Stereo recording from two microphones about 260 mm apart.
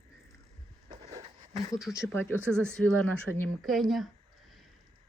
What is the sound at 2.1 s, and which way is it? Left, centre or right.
Speech, centre.